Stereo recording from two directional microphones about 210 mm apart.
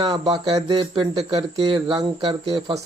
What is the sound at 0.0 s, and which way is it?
Speech, 20° right (ahead or behind).